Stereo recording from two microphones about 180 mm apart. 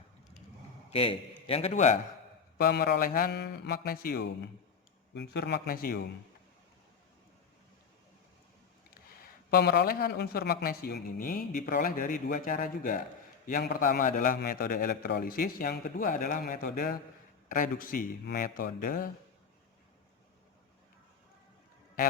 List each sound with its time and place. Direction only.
0.9 s a man's voice: 30° left (ahead or behind)
2.6 s speech: 65° left (ahead or behind)
5.1 s speech: 70° left (ahead or behind); by 6.1 s 55° left (ahead or behind)
9.2 s a man's voice: 60° left (ahead or behind)